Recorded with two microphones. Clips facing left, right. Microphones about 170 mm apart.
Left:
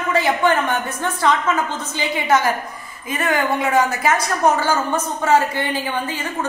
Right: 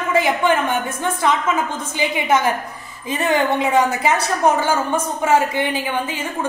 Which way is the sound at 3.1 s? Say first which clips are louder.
Right 2 dB; 25° right (ahead or behind).